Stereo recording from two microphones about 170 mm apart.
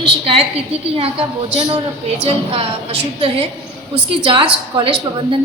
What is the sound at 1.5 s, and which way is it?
A woman's voice, 25° right (ahead or behind).